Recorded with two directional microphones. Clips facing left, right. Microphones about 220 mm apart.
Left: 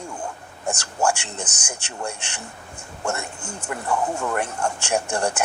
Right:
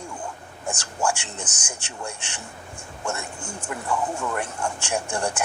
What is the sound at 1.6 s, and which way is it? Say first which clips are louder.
Speech: left 5 dB; 70° left (ahead or behind).